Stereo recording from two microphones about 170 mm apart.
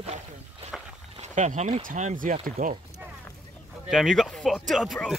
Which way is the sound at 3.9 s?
Centre (ahead or behind).